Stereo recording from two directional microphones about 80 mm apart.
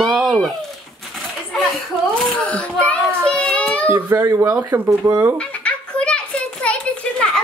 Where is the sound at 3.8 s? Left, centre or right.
Right.